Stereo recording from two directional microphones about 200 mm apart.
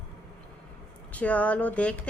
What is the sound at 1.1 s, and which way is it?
Speech, 5° left (ahead or behind).